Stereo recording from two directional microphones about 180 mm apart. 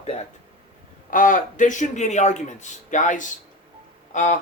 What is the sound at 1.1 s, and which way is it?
A man's voice, 50° left (ahead or behind).